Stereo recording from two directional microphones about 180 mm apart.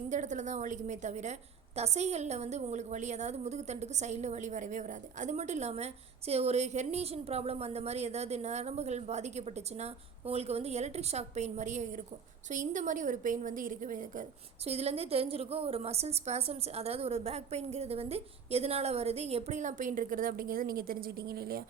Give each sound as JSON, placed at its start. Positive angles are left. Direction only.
{"t": 0.1, "sound": "a woman's voice", "side_deg": -40}
{"t": 14.6, "sound": "a woman's voice", "side_deg": -35}